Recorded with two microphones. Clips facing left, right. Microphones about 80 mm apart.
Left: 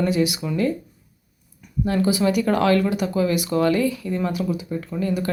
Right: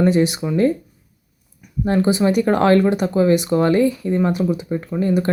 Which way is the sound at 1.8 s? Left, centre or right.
Right.